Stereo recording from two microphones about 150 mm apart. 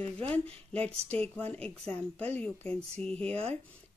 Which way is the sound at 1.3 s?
10° left (ahead or behind).